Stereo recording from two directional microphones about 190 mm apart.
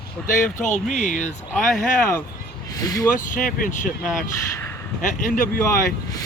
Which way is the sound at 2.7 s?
20° left (ahead or behind).